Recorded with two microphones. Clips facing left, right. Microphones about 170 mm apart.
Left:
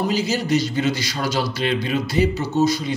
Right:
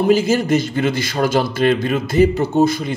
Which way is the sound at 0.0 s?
50° right (ahead or behind).